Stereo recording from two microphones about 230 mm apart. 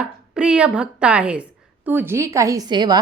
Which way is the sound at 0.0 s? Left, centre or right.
Centre.